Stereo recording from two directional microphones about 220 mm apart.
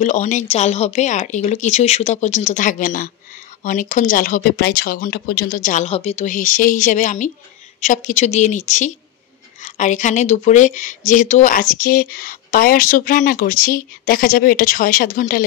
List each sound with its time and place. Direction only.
0.0 s speech: 35° left (ahead or behind)